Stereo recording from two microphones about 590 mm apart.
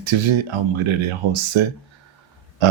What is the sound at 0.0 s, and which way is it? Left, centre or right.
Speech, right.